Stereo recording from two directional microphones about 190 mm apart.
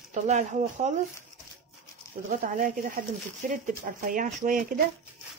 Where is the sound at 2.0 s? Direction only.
15° left (ahead or behind).